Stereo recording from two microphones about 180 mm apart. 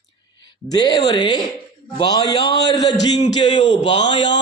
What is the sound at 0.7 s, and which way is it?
A man's voice, 20° left (ahead or behind).